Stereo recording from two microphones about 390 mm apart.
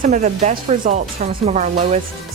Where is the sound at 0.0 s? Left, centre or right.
Centre.